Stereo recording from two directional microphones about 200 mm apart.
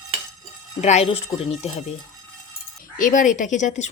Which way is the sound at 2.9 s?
40° left (ahead or behind).